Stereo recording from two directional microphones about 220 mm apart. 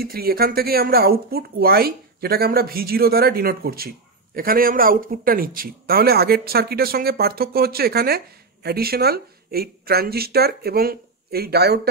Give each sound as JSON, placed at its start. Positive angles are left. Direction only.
{"t": 0.0, "sound": "speech", "side_deg": -45}